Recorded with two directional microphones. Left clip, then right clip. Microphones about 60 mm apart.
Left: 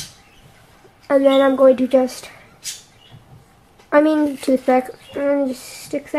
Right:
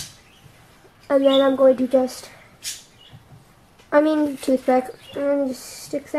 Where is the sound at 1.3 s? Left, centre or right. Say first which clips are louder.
Left 3 dB; left.